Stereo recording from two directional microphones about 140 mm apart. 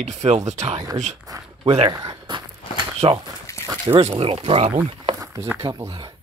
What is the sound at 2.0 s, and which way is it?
Walk, 30° right (ahead or behind).